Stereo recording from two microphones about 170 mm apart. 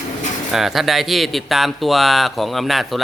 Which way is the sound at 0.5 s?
Centre (ahead or behind).